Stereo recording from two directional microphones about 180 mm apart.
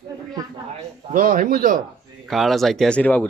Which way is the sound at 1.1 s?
45° right (ahead or behind).